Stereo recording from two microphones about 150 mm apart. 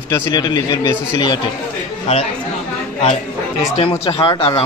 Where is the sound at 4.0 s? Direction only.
35° left (ahead or behind).